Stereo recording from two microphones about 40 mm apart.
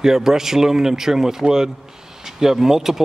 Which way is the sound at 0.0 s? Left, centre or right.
Centre.